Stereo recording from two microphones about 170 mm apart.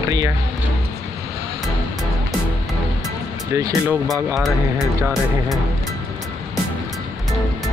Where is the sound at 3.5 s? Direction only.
15° right (ahead or behind).